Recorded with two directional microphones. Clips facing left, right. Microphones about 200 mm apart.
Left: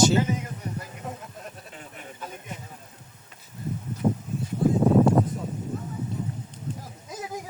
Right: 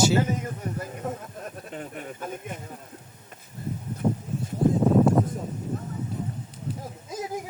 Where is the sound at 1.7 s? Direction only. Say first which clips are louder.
Right 7 dB; 50° right (ahead or behind).